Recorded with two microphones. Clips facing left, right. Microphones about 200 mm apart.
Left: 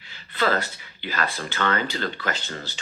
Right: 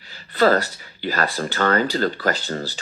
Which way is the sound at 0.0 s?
40° right (ahead or behind).